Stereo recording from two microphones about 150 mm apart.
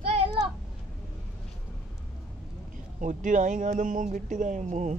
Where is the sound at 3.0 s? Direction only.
60° right (ahead or behind).